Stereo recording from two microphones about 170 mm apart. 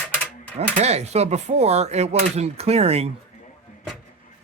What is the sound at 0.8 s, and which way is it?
Speech, 40° right (ahead or behind).